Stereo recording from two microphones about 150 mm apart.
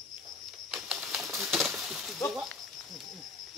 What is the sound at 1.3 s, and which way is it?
Pigeon, 5° right (ahead or behind).